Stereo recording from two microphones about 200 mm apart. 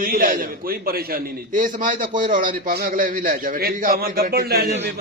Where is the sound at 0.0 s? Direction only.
45° right (ahead or behind).